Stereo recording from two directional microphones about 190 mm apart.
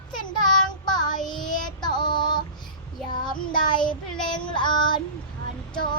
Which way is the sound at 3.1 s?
25° left (ahead or behind).